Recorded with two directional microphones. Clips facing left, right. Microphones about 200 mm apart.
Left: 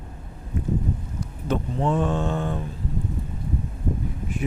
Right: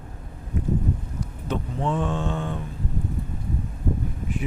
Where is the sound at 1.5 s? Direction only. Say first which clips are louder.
Left 3 dB; 40° left (ahead or behind).